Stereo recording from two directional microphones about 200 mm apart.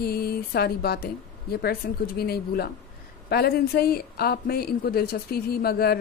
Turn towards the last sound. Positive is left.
turn(degrees=50)  # may be behind; listen again after turning